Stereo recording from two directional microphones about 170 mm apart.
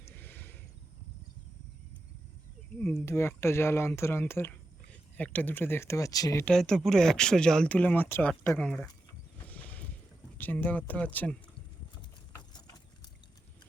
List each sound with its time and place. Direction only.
0.0 s a sound: 10° left (ahead or behind)
3.1 s speech: 15° left (ahead or behind)
6.4 s speech: 5° left (ahead or behind)
10.3 s speech: 10° left (ahead or behind)